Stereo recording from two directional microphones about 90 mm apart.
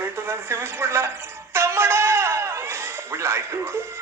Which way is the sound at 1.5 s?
30° right (ahead or behind).